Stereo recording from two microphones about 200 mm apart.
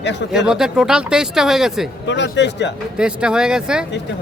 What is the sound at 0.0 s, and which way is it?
Speech, 60° left (ahead or behind).